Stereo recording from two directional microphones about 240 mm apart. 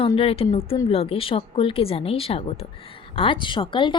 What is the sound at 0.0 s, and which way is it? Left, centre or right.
A woman's voice, left.